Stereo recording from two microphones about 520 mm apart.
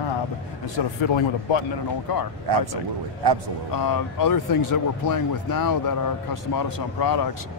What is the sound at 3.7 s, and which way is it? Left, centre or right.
Speech, left.